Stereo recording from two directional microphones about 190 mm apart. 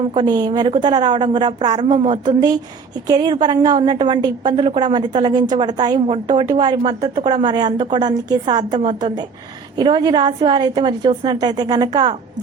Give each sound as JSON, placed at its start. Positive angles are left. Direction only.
{"t": 0.1, "sound": "a woman's voice", "side_deg": -25}